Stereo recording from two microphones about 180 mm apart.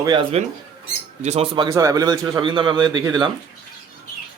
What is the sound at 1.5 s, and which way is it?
A man's voice, 20° right (ahead or behind).